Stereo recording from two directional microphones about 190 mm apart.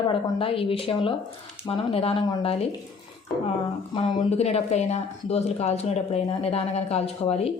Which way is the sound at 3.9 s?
25° left (ahead or behind).